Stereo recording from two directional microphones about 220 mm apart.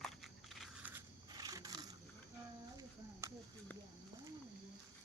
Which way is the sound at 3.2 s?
15° right (ahead or behind).